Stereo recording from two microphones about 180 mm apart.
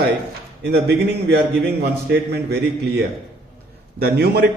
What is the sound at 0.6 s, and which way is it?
A man's voice, 70° right (ahead or behind).